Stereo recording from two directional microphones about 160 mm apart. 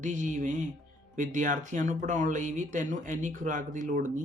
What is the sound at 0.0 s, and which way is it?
Speech, 50° right (ahead or behind).